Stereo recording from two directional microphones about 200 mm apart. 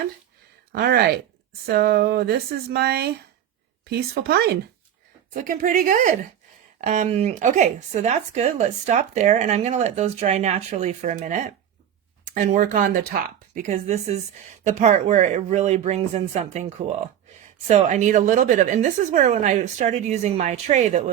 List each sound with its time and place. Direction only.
0.7 s speech: 50° right (ahead or behind)